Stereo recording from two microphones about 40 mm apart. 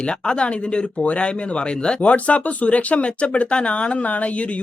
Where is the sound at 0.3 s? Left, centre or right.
Left.